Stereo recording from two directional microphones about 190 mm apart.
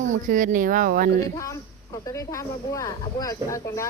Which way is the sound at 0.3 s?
45° right (ahead or behind).